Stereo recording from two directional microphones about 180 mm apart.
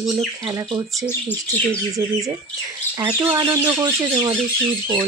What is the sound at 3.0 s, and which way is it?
Speech, 15° right (ahead or behind).